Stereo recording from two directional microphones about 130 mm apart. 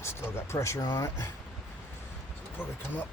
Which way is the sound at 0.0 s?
20° left (ahead or behind).